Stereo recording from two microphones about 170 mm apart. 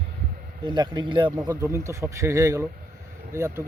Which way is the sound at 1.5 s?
15° right (ahead or behind).